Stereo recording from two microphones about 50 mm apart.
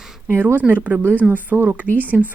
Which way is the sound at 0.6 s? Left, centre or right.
Right.